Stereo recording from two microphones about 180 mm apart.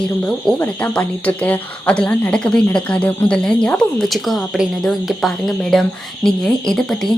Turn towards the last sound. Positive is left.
turn(degrees=0)  # may be behind; listen again after turning